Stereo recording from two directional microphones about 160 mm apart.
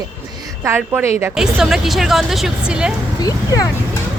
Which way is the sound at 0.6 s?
15° right (ahead or behind).